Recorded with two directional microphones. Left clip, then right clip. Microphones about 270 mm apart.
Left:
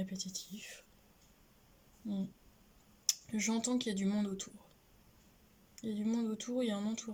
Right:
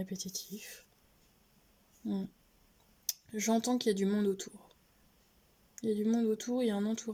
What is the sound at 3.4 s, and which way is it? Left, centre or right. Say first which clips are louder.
Speech: right 8 dB; right.